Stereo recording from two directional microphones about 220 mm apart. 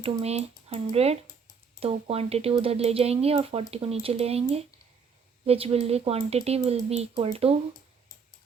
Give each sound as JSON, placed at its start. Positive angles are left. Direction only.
{"t": 0.0, "sound": "speech", "side_deg": -30}